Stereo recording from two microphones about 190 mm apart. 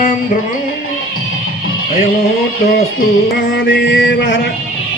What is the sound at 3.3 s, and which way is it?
Music, 65° left (ahead or behind).